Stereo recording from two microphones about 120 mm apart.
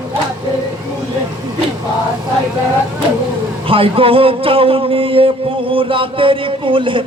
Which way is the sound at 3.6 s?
50° right (ahead or behind).